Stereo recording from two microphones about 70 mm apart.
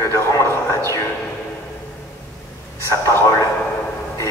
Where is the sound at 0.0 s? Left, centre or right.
Left.